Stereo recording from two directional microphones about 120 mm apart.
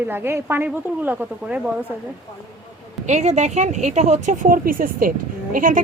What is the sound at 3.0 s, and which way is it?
A woman's voice, 75° right (ahead or behind).